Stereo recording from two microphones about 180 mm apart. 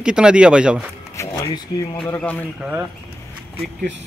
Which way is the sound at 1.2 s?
15° left (ahead or behind).